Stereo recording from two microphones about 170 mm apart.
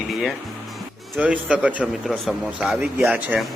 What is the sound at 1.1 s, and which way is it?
A man's voice, 5° right (ahead or behind).